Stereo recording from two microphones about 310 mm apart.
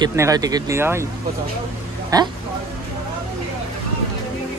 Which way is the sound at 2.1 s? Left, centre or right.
Centre.